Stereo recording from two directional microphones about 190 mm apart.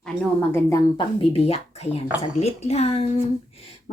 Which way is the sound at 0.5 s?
15° left (ahead or behind).